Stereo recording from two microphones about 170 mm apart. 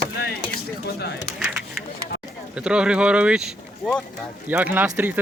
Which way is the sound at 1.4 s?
5° right (ahead or behind).